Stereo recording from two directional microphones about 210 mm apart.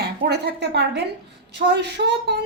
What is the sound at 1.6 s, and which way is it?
Speech, 40° right (ahead or behind).